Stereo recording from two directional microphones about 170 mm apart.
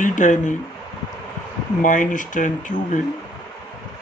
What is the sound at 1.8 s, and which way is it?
Speech, 50° left (ahead or behind).